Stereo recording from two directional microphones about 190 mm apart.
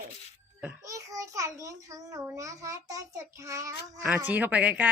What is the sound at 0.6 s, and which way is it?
Speech, 5° right (ahead or behind).